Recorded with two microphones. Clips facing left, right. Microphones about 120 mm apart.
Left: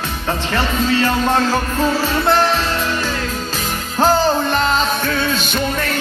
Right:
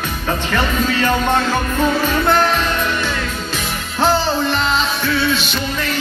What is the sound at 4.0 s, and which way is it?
Music, 45° left (ahead or behind).